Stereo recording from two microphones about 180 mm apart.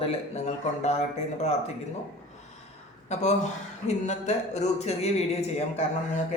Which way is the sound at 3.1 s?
40° left (ahead or behind).